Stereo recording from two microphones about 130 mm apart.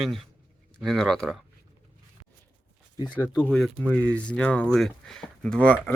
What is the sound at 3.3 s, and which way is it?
Speech, 10° left (ahead or behind).